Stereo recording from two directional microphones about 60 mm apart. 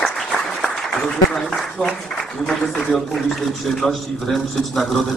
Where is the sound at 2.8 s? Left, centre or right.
Centre.